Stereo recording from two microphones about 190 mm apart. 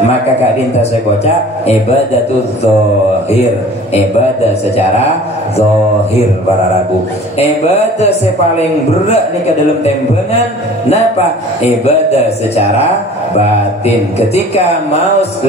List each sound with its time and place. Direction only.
7.3 s a man's voice: 35° left (ahead or behind)
11.8 s a man's voice: 35° left (ahead or behind)
13.8 s a man's voice: 35° left (ahead or behind)